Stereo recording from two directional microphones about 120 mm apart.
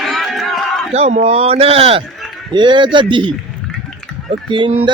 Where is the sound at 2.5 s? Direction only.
40° right (ahead or behind).